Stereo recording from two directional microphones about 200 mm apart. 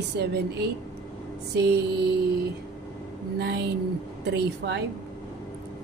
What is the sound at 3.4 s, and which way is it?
Speech, 60° right (ahead or behind).